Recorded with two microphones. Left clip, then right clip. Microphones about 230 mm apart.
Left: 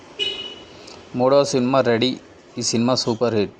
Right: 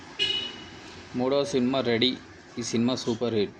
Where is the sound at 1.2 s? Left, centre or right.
Left.